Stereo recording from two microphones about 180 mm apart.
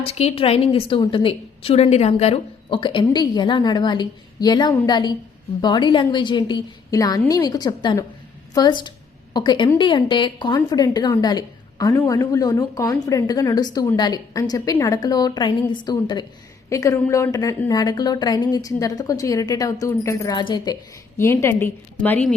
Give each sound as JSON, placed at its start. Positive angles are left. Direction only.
{"t": 0.0, "sound": "a woman's voice", "side_deg": 35}